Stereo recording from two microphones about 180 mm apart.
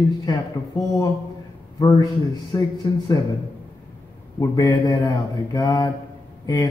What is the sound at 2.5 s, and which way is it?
Speech, 20° left (ahead or behind).